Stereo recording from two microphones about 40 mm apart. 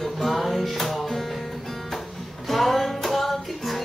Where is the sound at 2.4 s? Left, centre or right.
Centre.